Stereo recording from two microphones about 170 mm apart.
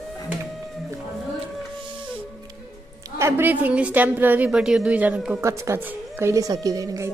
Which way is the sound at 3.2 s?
10° right (ahead or behind).